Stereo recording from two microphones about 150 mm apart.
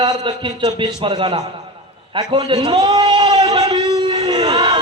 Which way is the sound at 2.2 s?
30° right (ahead or behind).